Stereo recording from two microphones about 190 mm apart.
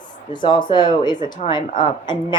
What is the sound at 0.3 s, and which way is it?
A woman's voice, 25° left (ahead or behind).